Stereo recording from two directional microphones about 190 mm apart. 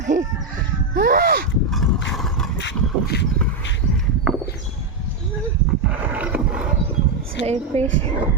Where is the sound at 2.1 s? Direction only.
Centre (ahead or behind).